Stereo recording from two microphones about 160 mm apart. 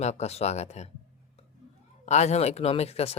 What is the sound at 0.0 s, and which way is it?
Speech, 45° left (ahead or behind).